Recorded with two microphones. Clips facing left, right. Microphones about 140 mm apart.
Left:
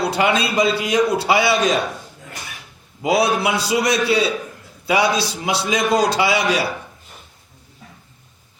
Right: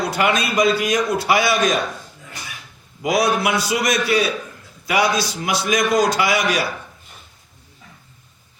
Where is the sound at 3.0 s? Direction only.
25° left (ahead or behind).